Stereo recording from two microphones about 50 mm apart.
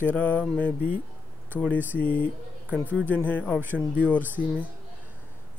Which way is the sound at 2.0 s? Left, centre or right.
Left.